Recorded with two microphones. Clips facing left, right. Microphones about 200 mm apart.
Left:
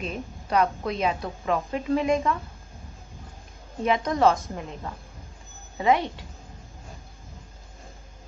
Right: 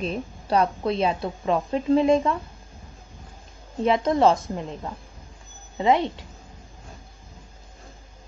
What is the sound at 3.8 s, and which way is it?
Speech, 25° right (ahead or behind).